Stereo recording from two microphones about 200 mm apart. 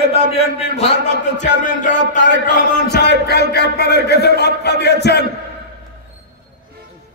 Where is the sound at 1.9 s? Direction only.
65° left (ahead or behind).